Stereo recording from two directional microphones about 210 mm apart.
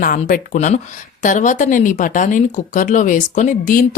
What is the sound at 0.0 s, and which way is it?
Speech, 40° left (ahead or behind).